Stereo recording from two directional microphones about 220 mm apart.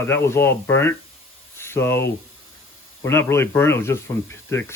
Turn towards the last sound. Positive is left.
turn(degrees=10)  # may be behind; listen again after turning